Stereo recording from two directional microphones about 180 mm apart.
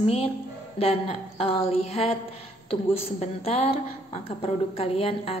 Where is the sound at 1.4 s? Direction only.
30° left (ahead or behind).